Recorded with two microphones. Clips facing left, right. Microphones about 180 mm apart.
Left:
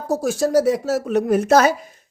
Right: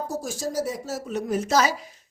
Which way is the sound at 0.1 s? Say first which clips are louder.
Left 11 dB; 70° left (ahead or behind).